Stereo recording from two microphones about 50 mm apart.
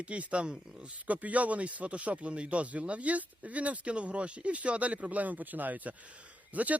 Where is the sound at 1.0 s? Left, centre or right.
Right.